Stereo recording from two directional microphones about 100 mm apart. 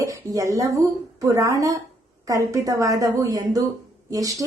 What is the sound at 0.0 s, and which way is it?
A woman's voice, 35° right (ahead or behind).